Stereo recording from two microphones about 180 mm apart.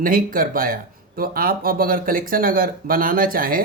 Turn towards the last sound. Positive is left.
turn(degrees=-50)  # may be behind; listen again after turning